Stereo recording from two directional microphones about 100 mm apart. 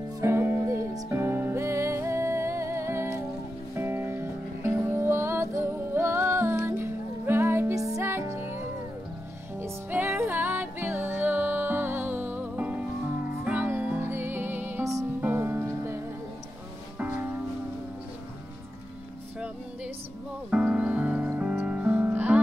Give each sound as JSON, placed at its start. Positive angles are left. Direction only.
{"t": 0.2, "sound": "music", "side_deg": -25}
{"t": 20.4, "sound": "music", "side_deg": -10}